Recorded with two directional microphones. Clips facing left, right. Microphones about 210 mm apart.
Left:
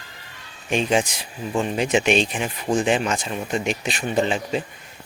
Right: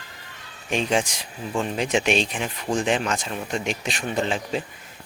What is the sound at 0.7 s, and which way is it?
Speech, centre (ahead or behind).